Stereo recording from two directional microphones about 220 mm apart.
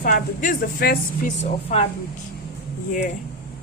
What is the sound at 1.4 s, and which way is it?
Speech, 30° left (ahead or behind).